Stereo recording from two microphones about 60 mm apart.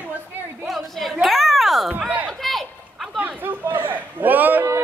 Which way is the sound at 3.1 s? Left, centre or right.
Right.